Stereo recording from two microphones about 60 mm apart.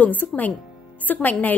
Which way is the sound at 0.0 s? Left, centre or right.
Left.